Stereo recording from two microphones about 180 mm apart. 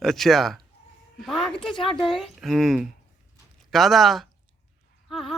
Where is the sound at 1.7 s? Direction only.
25° left (ahead or behind).